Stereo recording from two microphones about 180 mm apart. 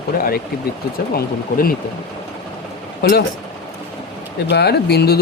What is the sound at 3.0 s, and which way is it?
Speech, 60° left (ahead or behind).